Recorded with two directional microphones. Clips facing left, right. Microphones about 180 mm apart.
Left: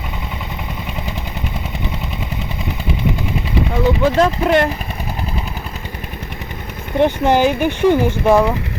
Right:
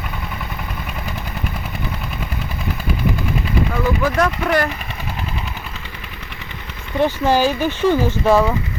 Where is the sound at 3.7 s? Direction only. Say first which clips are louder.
Left 6 dB; 25° left (ahead or behind).